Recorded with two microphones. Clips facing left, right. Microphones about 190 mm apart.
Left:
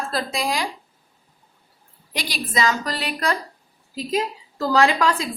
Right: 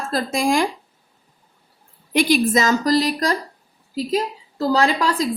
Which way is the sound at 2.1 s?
50° right (ahead or behind).